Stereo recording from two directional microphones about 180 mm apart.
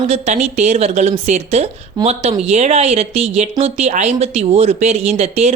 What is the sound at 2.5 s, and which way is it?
Speech, 35° right (ahead or behind).